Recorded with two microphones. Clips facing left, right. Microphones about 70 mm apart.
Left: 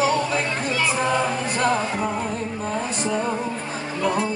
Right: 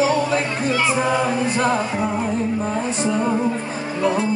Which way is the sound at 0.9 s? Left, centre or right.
Centre.